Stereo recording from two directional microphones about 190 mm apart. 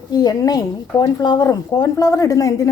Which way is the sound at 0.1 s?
20° left (ahead or behind).